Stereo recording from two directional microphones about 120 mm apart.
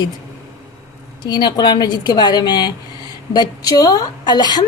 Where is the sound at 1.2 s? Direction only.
40° left (ahead or behind).